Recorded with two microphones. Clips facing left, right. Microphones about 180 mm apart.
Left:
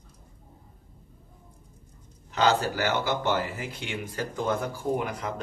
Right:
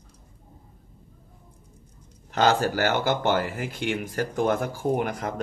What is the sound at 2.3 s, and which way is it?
Speech, 50° right (ahead or behind).